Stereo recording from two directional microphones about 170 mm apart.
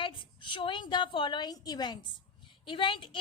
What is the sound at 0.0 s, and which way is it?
A woman's voice, 30° left (ahead or behind).